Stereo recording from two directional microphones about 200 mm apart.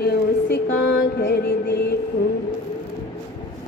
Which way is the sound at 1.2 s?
55° left (ahead or behind).